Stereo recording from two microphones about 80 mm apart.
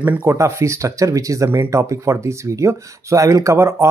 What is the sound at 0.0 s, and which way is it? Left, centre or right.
Speech, right.